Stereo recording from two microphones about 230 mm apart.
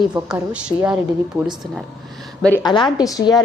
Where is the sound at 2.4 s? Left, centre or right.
Centre.